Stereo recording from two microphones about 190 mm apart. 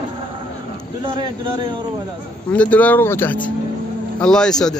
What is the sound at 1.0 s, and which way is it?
Speech, 25° right (ahead or behind).